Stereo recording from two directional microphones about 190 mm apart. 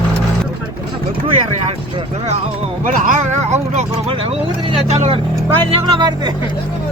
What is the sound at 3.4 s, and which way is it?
Speech, 35° right (ahead or behind).